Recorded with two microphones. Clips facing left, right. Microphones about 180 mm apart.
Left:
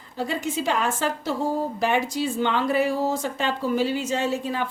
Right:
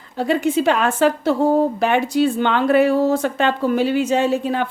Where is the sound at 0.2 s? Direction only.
65° right (ahead or behind).